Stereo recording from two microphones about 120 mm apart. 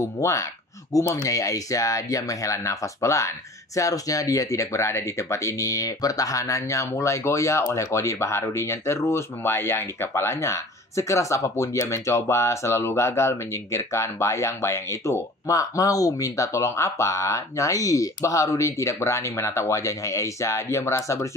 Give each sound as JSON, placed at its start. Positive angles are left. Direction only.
{"t": 0.0, "sound": "speech", "side_deg": 25}